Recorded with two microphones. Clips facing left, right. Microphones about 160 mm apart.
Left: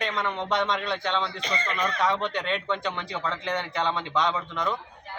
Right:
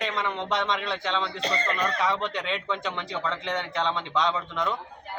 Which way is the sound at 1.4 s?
35° right (ahead or behind).